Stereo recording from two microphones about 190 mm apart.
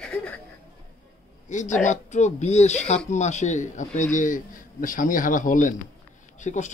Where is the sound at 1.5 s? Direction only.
40° left (ahead or behind).